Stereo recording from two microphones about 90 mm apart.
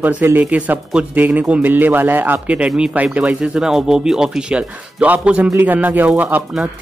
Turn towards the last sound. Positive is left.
turn(degrees=-20)  # may be behind; listen again after turning